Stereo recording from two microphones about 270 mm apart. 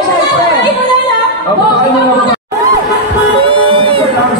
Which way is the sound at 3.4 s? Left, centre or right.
Centre.